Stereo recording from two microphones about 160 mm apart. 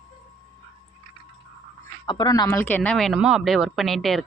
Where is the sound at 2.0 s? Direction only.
25° left (ahead or behind).